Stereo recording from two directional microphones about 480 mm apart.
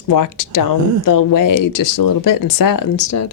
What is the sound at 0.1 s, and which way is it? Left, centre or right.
Speech, left.